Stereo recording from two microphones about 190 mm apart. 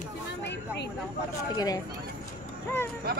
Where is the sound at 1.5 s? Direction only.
20° left (ahead or behind).